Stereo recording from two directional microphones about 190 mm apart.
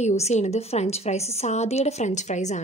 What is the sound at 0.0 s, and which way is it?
A woman's voice, 35° left (ahead or behind).